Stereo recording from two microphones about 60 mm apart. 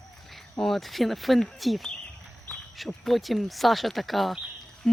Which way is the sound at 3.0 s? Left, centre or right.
Centre.